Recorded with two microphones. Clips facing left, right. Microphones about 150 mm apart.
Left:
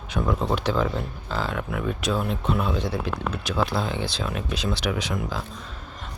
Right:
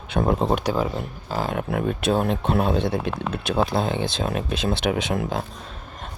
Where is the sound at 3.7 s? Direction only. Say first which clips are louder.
Right 4 dB; 55° right (ahead or behind).